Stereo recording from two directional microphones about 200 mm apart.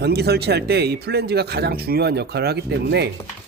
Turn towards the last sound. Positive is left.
turn(degrees=-55)  # may be behind; listen again after turning